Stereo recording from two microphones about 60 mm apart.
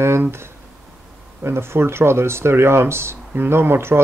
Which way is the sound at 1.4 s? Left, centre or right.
Right.